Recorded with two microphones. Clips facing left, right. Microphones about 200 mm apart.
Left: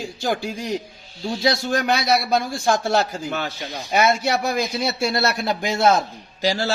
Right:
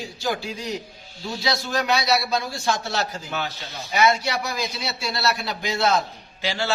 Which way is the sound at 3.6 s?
15° left (ahead or behind).